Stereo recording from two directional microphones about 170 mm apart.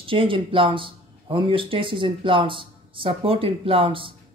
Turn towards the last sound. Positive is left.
turn(degrees=-30)  # may be behind; listen again after turning